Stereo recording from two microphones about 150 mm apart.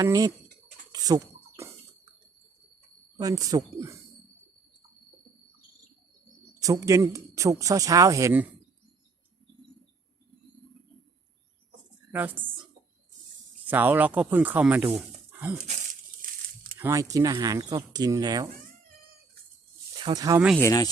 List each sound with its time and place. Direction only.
0.0 s speech: 20° right (ahead or behind)
0.9 s a sound: 25° right (ahead or behind)
3.2 s speech: 25° right (ahead or behind)
6.6 s speech: 20° right (ahead or behind)
12.1 s speech: 15° right (ahead or behind)
13.7 s speech: 15° right (ahead or behind)
16.7 s speech: 20° right (ahead or behind)
20.0 s speech: 30° right (ahead or behind)
20.6 s speech: 20° left (ahead or behind)